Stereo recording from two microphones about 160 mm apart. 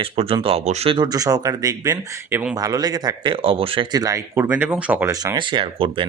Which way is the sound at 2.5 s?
25° right (ahead or behind).